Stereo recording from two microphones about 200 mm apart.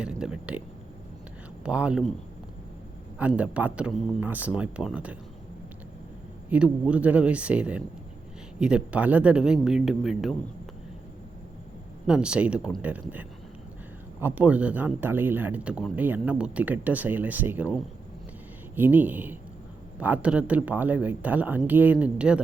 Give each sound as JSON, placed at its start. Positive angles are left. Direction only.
{"t": 0.0, "sound": "speech", "side_deg": -5}
{"t": 1.6, "sound": "speech", "side_deg": -5}
{"t": 3.2, "sound": "speech", "side_deg": -5}
{"t": 6.5, "sound": "speech", "side_deg": -5}
{"t": 12.0, "sound": "speech", "side_deg": -5}